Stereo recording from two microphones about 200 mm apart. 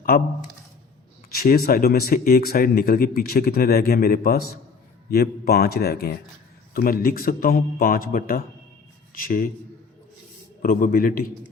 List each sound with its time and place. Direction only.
0.1 s speech: 45° left (ahead or behind)
1.3 s speech: 45° left (ahead or behind)
10.6 s speech: 45° left (ahead or behind)